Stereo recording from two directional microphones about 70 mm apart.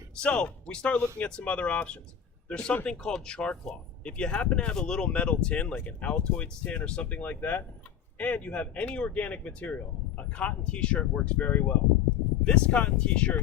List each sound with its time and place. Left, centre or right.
0.2 s speech: centre